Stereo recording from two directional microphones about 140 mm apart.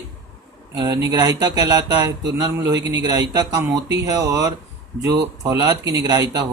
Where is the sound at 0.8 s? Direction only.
25° right (ahead or behind).